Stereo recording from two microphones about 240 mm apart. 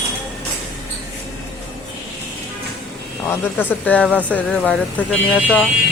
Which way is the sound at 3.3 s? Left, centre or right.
Centre.